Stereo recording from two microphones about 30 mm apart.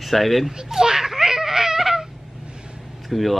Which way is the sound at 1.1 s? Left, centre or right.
Centre.